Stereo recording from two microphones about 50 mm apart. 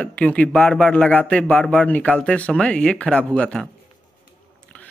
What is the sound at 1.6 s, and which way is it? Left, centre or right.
Speech, centre.